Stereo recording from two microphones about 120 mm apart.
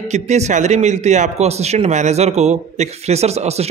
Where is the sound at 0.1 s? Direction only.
70° right (ahead or behind).